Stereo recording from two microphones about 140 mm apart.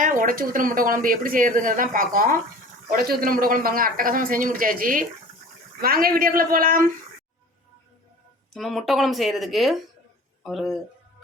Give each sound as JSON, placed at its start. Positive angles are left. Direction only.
{"t": 0.0, "sound": "speech", "side_deg": -70}
{"t": 8.5, "sound": "speech", "side_deg": 0}